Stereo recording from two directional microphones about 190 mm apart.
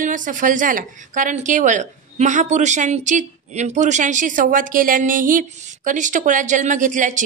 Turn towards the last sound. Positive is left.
turn(degrees=-40)  # may be behind; listen again after turning